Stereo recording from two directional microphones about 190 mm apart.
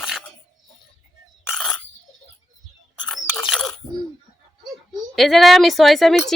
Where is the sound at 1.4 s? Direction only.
Centre (ahead or behind).